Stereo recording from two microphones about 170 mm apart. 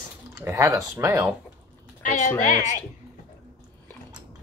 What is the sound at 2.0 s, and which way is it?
Speech, 45° left (ahead or behind).